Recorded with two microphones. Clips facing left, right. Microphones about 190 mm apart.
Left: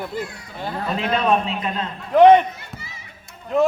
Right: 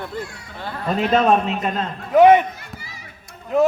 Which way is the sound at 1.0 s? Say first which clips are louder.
Right 4 dB; 45° right (ahead or behind).